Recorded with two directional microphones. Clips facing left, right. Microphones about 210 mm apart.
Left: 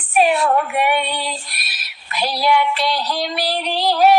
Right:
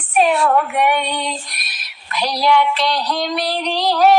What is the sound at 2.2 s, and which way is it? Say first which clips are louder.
Female singing: right 2 dB; 5° left (ahead or behind).